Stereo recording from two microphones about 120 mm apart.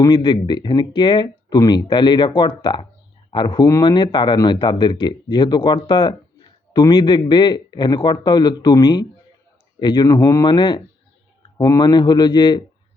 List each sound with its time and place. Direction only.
0.0 s speech: 35° left (ahead or behind)